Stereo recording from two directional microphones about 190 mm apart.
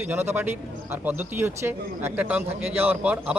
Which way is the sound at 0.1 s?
10° right (ahead or behind).